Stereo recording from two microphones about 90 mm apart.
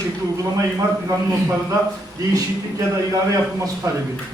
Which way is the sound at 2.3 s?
35° right (ahead or behind).